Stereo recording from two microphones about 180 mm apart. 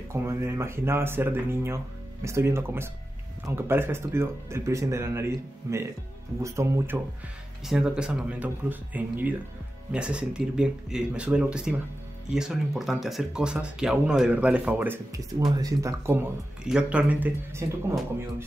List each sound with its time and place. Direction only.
0.1 s speech: 15° right (ahead or behind)
7.6 s speech: 5° right (ahead or behind)